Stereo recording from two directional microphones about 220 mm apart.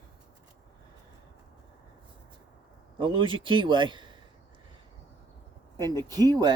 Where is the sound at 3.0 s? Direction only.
20° right (ahead or behind).